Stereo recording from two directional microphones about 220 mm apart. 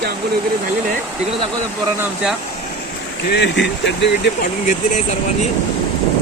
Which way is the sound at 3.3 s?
50° left (ahead or behind).